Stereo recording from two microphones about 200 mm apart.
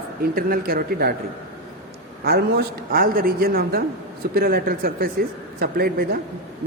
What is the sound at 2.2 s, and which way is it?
A woman's voice, 50° right (ahead or behind).